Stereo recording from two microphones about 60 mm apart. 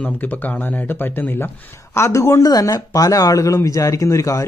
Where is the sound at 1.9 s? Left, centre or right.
Left.